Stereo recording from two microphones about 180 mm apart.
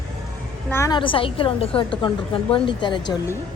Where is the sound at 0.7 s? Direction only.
15° left (ahead or behind).